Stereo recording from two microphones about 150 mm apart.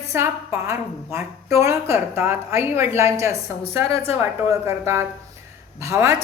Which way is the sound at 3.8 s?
40° left (ahead or behind).